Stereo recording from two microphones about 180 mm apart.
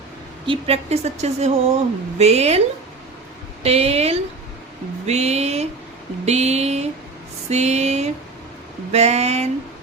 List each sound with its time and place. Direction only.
0.4 s speech: 30° right (ahead or behind)
3.6 s speech: 35° right (ahead or behind)